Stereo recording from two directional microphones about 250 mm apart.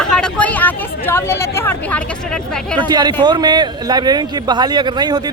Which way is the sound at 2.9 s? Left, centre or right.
Centre.